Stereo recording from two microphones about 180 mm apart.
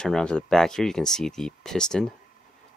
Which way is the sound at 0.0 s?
5° left (ahead or behind).